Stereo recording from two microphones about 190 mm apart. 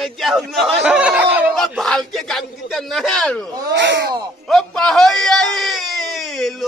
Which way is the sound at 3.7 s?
70° right (ahead or behind).